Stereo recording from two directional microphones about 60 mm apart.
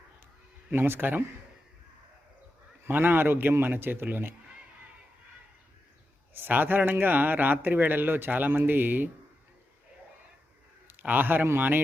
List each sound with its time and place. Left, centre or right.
0.7 s speech: right
2.8 s speech: right
6.3 s speech: right
10.8 s a sound: right